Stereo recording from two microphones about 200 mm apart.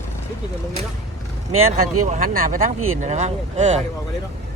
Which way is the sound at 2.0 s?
45° right (ahead or behind).